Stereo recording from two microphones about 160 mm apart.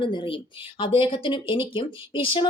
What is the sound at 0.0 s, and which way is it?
Speech, 30° left (ahead or behind).